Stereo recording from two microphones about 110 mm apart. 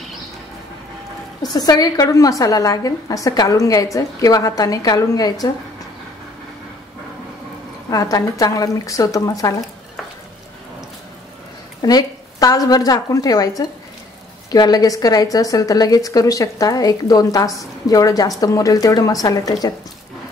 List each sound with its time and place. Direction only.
1.4 s a woman's voice: 35° left (ahead or behind)
7.9 s a woman's voice: 35° left (ahead or behind)
11.8 s a woman's voice: 35° left (ahead or behind)